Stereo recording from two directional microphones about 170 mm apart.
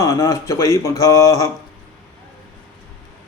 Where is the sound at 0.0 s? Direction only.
15° left (ahead or behind).